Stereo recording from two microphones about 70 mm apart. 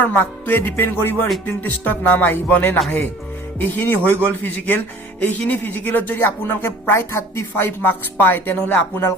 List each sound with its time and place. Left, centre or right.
0.0 s speech: left